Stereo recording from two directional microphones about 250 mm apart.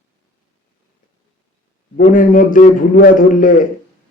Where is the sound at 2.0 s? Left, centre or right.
Left.